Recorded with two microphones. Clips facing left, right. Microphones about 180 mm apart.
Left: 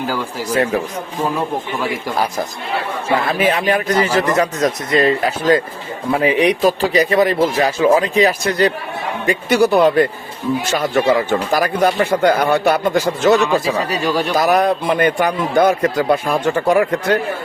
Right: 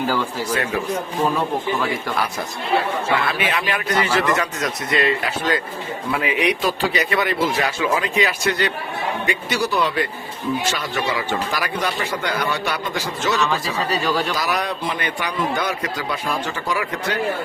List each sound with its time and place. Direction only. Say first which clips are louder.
3.2 s a man's voice: left 6 dB; 40° left (ahead or behind)
13.9 s speech: left 3 dB; 15° left (ahead or behind)
14.3 s a man's voice: left 9 dB; 50° left (ahead or behind)